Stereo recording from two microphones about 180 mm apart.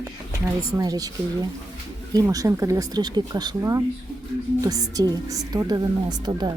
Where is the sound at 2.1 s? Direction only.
20° right (ahead or behind).